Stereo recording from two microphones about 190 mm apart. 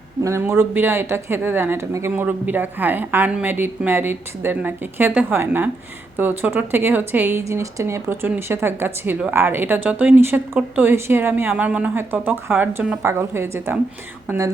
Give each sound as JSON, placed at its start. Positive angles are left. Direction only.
{"t": 0.3, "sound": "speech", "side_deg": -15}